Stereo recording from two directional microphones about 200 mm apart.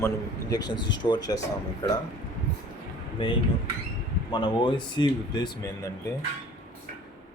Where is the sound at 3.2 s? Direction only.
25° left (ahead or behind).